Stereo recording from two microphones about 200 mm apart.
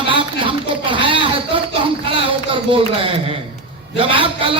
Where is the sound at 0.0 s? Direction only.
25° right (ahead or behind).